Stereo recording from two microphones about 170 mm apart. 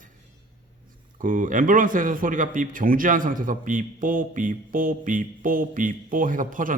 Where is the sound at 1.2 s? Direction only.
50° right (ahead or behind).